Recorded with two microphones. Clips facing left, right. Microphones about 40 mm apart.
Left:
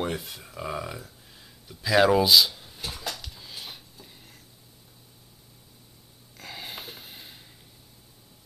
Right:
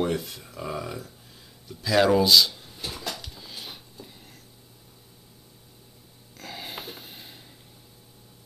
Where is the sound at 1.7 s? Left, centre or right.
Centre.